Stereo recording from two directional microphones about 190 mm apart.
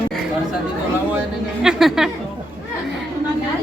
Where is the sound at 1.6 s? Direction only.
Centre (ahead or behind).